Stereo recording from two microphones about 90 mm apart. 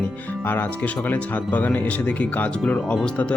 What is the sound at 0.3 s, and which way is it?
Speech, 20° left (ahead or behind).